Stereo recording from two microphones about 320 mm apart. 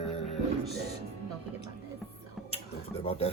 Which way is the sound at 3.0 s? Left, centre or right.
Centre.